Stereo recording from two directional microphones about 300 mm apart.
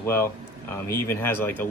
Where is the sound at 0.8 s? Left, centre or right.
Centre.